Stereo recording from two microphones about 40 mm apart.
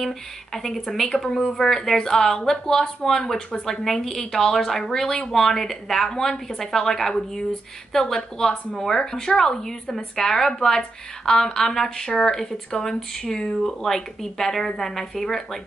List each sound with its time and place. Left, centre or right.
0.6 s a woman's voice: centre